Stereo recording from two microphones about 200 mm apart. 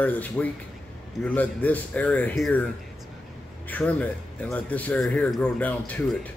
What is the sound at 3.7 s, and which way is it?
A man's voice, 10° left (ahead or behind).